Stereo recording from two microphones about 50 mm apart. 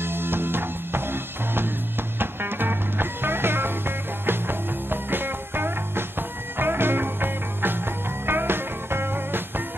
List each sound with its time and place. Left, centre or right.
0.0 s music: right